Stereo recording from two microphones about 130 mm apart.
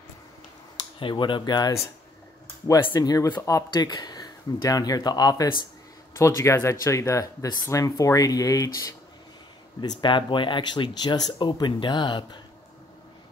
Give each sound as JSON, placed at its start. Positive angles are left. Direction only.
{"t": 0.9, "sound": "speech", "side_deg": 40}
{"t": 2.8, "sound": "speech", "side_deg": 30}
{"t": 9.8, "sound": "speech", "side_deg": 35}